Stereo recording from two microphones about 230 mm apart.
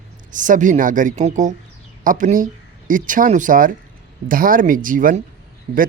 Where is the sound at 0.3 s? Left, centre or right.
Right.